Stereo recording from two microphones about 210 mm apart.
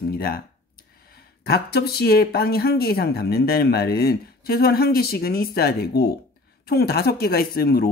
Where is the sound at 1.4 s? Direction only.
50° left (ahead or behind).